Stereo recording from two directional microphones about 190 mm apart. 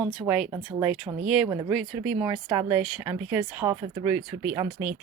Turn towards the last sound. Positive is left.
turn(degrees=-15)  # may be behind; listen again after turning